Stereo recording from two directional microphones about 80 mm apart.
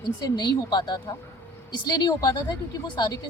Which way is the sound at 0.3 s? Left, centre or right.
Left.